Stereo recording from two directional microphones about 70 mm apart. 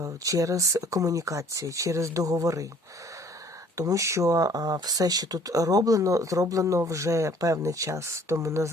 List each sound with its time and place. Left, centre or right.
0.0 s speech: right
3.8 s speech: right